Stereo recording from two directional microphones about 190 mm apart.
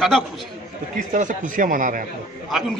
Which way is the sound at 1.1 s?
45° right (ahead or behind).